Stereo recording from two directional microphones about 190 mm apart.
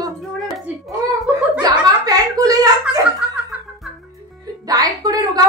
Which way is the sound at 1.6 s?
20° right (ahead or behind).